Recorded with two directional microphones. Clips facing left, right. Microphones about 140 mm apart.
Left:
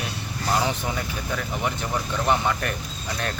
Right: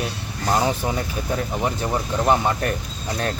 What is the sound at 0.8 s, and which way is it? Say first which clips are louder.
Speech: right 4 dB; 30° right (ahead or behind).